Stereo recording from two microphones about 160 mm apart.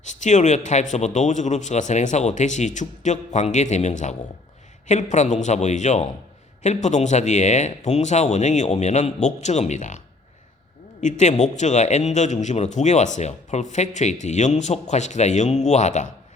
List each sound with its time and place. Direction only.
0.0 s a man's voice: 50° left (ahead or behind)
11.0 s a man's voice: 45° left (ahead or behind)